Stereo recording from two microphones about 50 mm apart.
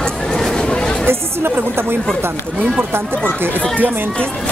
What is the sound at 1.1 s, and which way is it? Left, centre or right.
Speech, right.